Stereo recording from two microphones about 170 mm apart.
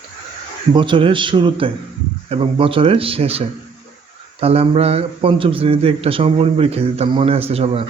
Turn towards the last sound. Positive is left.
turn(degrees=-35)  # may be behind; listen again after turning